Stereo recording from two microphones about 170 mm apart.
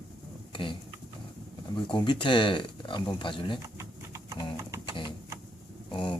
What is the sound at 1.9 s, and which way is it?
Speech, 25° left (ahead or behind).